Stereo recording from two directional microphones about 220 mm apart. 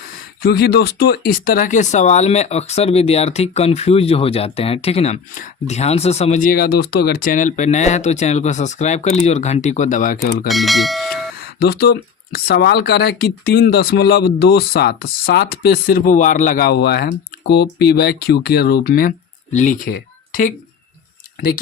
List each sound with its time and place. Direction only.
0.4 s speech: 45° left (ahead or behind)
10.5 s speech: centre (ahead or behind)
11.6 s speech: 45° left (ahead or behind)
19.9 s a sound: 40° left (ahead or behind)